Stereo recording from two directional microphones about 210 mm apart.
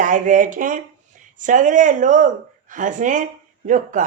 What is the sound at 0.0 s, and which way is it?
Speech, 40° right (ahead or behind).